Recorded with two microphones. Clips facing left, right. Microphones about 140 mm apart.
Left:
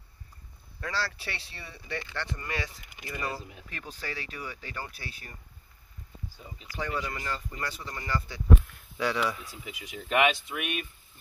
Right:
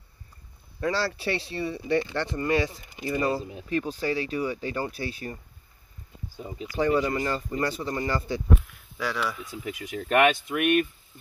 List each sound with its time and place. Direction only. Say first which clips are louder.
0.7 s speech: right 7 dB; 25° right (ahead or behind)
6.8 s speech: right 10 dB; 40° right (ahead or behind)
8.9 s speech: left 1 dB; centre (ahead or behind)
9.7 s speech: right 6 dB; 50° right (ahead or behind)